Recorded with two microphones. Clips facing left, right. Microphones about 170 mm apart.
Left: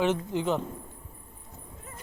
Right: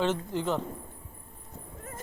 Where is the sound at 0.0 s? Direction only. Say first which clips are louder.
Left 2 dB; 15° left (ahead or behind).